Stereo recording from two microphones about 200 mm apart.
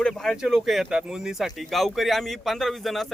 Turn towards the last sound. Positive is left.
turn(degrees=0)  # may be behind; listen again after turning